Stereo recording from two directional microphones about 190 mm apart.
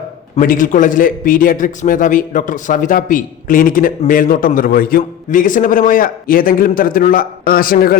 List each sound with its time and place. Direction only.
0.3 s a man's voice: 45° left (ahead or behind)